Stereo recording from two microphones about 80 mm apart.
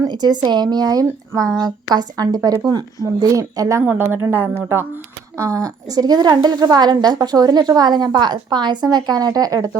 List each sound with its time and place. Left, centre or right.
0.1 s a woman's voice: right
3.8 s a woman's voice: right
5.6 s a woman's voice: right